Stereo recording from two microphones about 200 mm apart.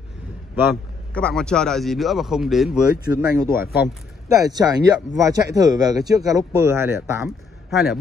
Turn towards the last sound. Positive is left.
turn(degrees=-5)  # may be behind; listen again after turning